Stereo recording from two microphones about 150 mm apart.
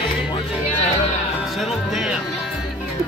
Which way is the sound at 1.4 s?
Centre (ahead or behind).